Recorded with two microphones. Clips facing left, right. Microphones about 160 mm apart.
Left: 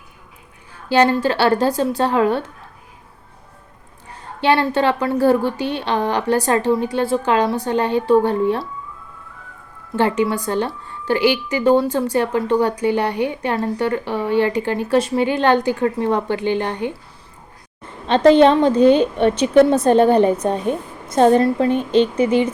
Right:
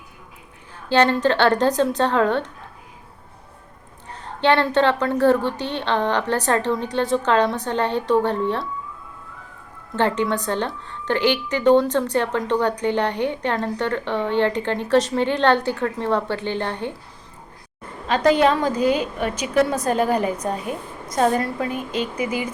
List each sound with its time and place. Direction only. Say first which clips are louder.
0.9 s a woman's voice: left 2 dB; 10° left (ahead or behind)
4.4 s a woman's voice: left 1 dB; 10° left (ahead or behind)
9.9 s a woman's voice: left 3 dB; 10° left (ahead or behind)
18.1 s a woman's voice: left 6 dB; 25° left (ahead or behind)